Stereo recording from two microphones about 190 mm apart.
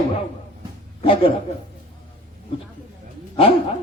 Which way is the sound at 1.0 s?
30° left (ahead or behind).